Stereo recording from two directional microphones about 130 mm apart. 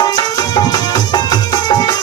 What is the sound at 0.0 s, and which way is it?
Music, 30° left (ahead or behind).